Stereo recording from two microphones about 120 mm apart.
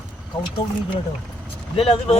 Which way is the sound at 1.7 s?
50° left (ahead or behind).